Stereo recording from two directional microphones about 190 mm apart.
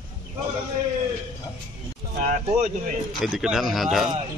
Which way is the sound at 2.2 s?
45° right (ahead or behind).